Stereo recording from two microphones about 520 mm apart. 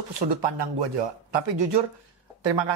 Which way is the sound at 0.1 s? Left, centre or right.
Right.